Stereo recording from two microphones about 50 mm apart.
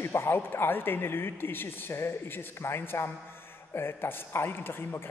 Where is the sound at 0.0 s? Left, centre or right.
Left.